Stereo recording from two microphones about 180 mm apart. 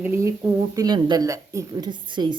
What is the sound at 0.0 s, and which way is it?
Speech, 15° right (ahead or behind).